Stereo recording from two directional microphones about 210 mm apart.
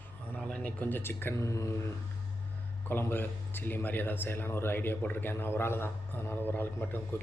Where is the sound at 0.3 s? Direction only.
5° left (ahead or behind).